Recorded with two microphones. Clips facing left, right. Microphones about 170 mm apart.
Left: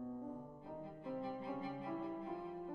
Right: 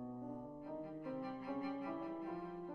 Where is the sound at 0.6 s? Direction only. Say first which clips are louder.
Right 3 dB; 25° left (ahead or behind).